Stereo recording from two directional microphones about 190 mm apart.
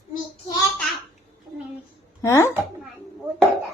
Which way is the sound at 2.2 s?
15° left (ahead or behind).